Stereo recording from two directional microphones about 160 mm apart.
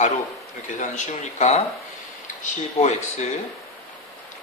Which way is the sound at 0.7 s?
50° left (ahead or behind).